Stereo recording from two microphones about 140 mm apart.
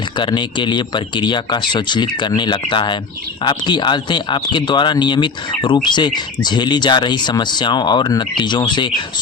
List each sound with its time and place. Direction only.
0.2 s speech: 35° left (ahead or behind)